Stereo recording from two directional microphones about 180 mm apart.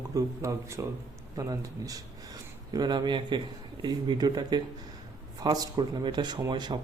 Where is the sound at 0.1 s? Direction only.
15° right (ahead or behind).